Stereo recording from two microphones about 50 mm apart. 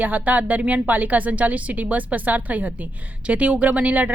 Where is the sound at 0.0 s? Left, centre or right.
Right.